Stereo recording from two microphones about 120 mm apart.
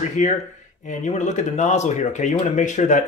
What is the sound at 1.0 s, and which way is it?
Speech, 75° left (ahead or behind).